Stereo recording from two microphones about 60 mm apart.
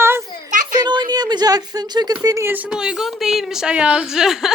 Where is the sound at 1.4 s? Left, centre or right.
Right.